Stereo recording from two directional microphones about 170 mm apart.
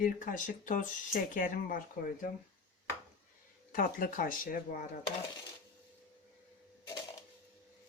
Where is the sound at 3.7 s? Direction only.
55° left (ahead or behind).